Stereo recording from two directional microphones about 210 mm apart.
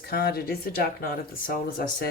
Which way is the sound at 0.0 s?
50° left (ahead or behind).